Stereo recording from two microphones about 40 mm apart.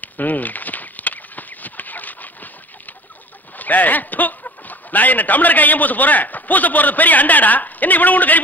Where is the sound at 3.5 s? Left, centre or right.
Left.